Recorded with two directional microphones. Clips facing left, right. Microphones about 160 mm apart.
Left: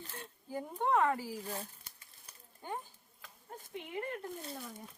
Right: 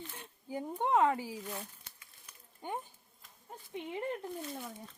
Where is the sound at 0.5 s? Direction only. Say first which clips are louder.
Right 1 dB; 20° right (ahead or behind).